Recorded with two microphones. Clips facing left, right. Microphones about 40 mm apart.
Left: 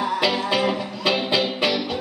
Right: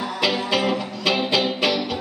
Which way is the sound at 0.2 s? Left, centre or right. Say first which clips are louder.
Right 3 dB; centre.